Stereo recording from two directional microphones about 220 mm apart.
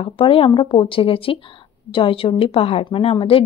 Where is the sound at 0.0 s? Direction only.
25° left (ahead or behind).